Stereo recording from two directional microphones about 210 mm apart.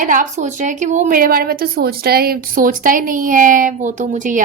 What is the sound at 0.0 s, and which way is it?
A woman's voice, 40° right (ahead or behind).